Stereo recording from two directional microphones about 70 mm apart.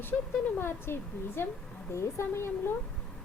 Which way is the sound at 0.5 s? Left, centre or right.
Left.